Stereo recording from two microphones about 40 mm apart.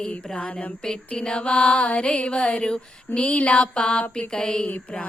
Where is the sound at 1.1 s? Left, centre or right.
Left.